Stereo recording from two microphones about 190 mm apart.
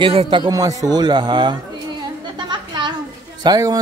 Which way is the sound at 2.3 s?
25° right (ahead or behind).